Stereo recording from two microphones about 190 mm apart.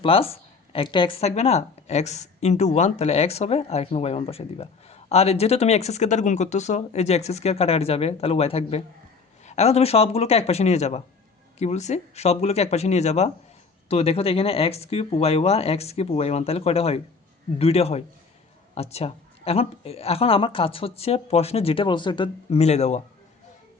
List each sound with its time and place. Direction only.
0.0 s speech: 30° left (ahead or behind)